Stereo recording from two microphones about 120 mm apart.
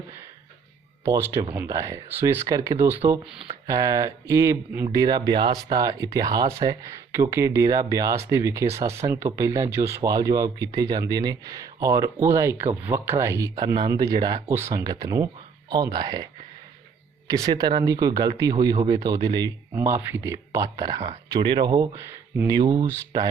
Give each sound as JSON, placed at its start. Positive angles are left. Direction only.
{"t": 1.0, "sound": "speech", "side_deg": -25}
{"t": 3.7, "sound": "speech", "side_deg": -30}
{"t": 14.5, "sound": "speech", "side_deg": -20}
{"t": 14.8, "sound": "speech", "side_deg": -30}
{"t": 19.7, "sound": "speech", "side_deg": -20}
{"t": 20.7, "sound": "speech", "side_deg": -35}